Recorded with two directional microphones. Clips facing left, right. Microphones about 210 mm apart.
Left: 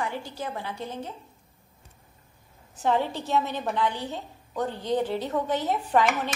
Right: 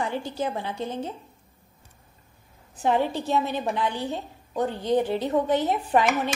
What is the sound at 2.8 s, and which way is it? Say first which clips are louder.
Speech: right 2 dB; 15° right (ahead or behind).